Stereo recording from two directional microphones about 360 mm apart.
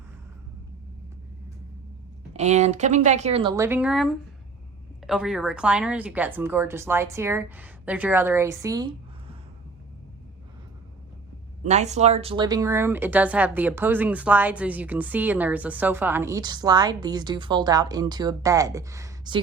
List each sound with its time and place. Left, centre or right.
2.3 s a woman's voice: centre
11.6 s speech: centre